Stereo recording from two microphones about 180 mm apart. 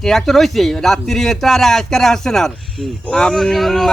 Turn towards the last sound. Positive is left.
turn(degrees=0)  # may be behind; listen again after turning